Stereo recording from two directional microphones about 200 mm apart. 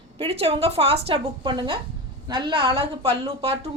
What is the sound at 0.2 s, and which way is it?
A woman's voice, 30° right (ahead or behind).